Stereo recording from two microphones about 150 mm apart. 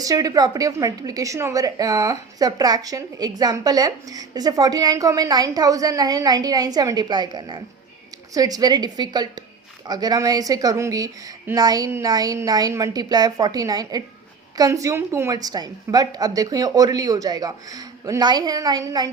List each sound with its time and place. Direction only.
0.0 s a woman's voice: 25° right (ahead or behind)